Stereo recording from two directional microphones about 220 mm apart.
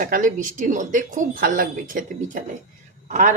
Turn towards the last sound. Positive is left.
turn(degrees=-35)  # may be behind; listen again after turning